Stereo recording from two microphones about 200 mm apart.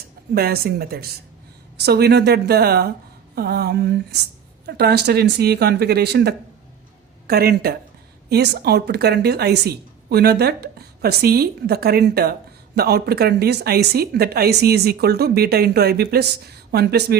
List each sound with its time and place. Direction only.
0.3 s a woman's voice: 50° right (ahead or behind)